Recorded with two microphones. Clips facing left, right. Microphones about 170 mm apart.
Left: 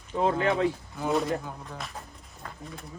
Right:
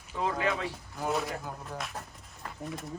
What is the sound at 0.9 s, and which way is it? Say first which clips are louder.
Speech: left 1 dB; centre (ahead or behind).